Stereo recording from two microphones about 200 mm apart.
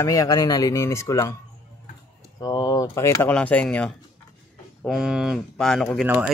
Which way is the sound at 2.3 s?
20° left (ahead or behind).